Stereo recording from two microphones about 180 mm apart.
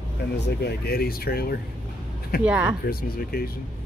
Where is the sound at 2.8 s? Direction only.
55° left (ahead or behind).